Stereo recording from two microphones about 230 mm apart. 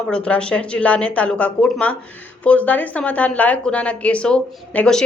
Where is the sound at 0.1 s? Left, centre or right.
Centre.